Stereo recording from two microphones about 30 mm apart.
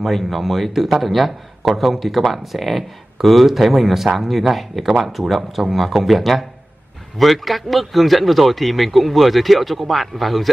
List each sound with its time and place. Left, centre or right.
0.0 s a man's voice: centre